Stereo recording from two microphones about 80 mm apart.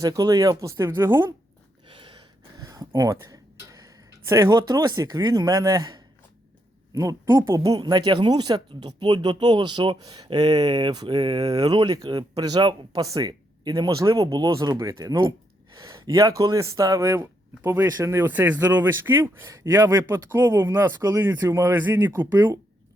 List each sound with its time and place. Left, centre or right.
0.0 s a man's voice: right
1.9 s a sound: right
3.0 s a sound: right
4.4 s speech: right
6.9 s a man's voice: right
7.8 s speech: right
14.9 s a man's voice: right
18.3 s a man's voice: right